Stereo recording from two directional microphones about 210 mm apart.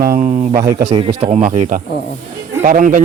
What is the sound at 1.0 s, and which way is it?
Speech, 30° right (ahead or behind).